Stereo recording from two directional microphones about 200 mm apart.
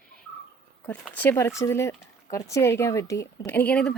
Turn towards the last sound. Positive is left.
turn(degrees=5)  # may be behind; listen again after turning